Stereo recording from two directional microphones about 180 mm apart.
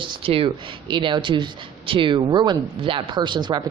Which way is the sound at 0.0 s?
30° right (ahead or behind).